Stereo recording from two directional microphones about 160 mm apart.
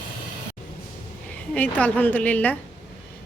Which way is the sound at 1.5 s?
10° left (ahead or behind).